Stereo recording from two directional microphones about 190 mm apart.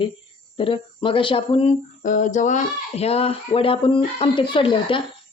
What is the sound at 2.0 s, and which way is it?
Speech, 40° left (ahead or behind).